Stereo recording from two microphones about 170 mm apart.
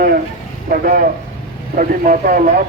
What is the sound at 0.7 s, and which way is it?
A man's voice, 60° right (ahead or behind).